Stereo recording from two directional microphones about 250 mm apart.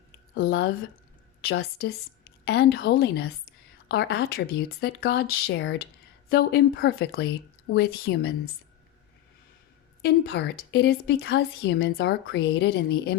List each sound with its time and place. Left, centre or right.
0.3 s speech: left
10.0 s speech: left